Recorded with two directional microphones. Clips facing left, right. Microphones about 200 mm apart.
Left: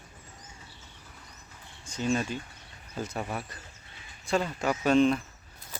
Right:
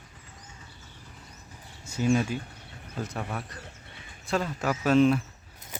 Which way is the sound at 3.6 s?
65° right (ahead or behind).